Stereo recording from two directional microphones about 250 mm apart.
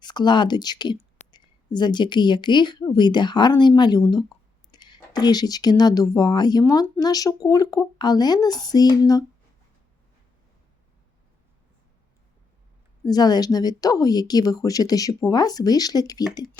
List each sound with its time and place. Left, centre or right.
0.0 s speech: centre
13.1 s speech: centre